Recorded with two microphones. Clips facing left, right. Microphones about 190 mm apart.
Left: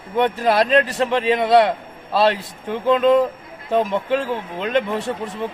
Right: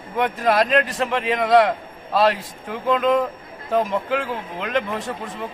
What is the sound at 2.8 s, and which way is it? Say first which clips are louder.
Speech: left 4 dB; 30° left (ahead or behind).